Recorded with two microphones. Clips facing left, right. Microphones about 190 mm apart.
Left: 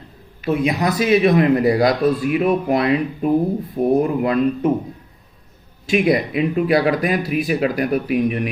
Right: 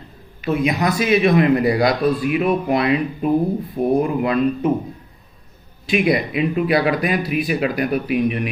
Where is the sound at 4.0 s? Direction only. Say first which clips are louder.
Left 1 dB; 40° left (ahead or behind).